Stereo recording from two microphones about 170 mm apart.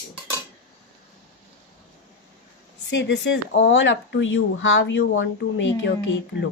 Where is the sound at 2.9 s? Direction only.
90° left.